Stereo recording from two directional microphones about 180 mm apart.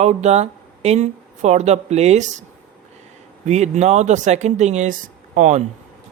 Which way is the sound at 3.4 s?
40° right (ahead or behind).